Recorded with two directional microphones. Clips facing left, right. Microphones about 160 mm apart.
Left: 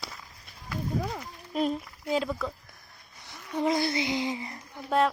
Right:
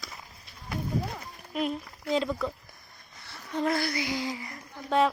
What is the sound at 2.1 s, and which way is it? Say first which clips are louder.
Speech: right 1 dB; 5° left (ahead or behind).